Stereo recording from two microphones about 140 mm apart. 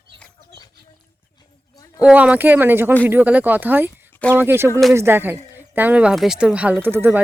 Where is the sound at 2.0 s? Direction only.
10° right (ahead or behind).